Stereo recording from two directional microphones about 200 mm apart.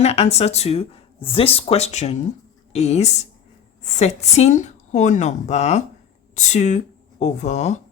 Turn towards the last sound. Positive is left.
turn(degrees=35)  # may be behind; listen again after turning